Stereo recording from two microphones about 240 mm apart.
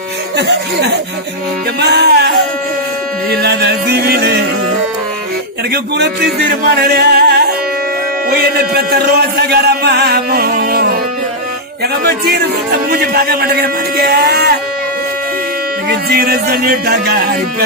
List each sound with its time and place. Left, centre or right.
0.3 s music: right
3.3 s music: right
5.7 s a man's voice: right
15.9 s a man's voice: right